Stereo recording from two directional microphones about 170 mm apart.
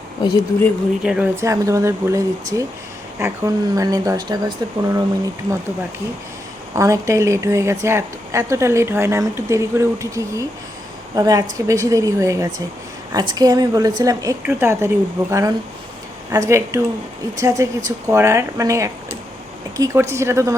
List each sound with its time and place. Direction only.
1.0 s speech: 5° right (ahead or behind)
1.4 s a woman's voice: 20° right (ahead or behind)
6.7 s a woman's voice: 20° right (ahead or behind)